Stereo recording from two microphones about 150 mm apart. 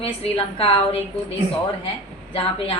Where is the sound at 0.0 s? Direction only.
40° left (ahead or behind).